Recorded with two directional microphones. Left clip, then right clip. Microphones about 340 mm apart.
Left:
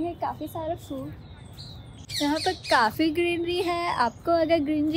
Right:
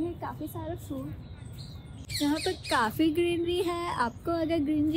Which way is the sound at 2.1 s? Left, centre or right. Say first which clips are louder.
Left 4 dB; centre.